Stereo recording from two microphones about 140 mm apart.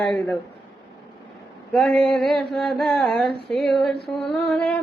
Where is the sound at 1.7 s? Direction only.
5° left (ahead or behind).